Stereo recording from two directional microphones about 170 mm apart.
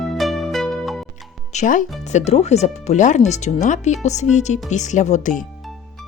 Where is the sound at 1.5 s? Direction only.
50° left (ahead or behind).